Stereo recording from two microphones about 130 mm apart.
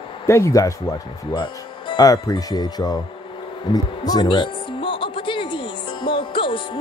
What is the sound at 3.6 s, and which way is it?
Music, 30° left (ahead or behind).